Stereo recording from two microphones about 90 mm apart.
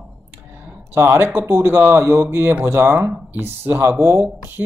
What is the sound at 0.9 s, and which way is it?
Speech, 25° right (ahead or behind).